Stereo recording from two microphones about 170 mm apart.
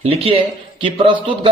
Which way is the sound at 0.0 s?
35° right (ahead or behind).